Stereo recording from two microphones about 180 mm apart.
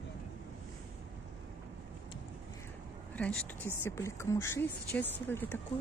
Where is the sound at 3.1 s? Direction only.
5° left (ahead or behind).